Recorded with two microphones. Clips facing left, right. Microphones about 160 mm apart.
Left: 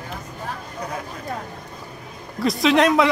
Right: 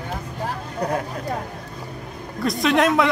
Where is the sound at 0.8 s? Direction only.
65° right (ahead or behind).